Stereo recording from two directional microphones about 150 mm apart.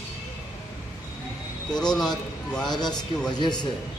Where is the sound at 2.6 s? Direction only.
30° left (ahead or behind).